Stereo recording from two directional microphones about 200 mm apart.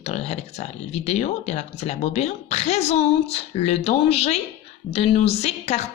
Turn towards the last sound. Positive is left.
turn(degrees=35)  # may be behind; listen again after turning